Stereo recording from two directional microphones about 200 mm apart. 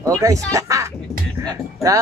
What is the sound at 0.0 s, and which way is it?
Speech, 15° right (ahead or behind).